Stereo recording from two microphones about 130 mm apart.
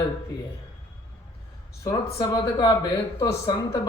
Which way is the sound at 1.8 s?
25° left (ahead or behind).